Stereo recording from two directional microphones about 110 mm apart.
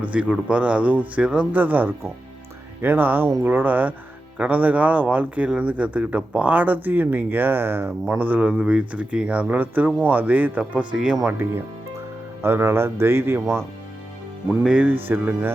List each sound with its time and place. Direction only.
0.0 s speech: 10° right (ahead or behind)
11.3 s speech: 20° right (ahead or behind)
14.6 s speech: 10° right (ahead or behind)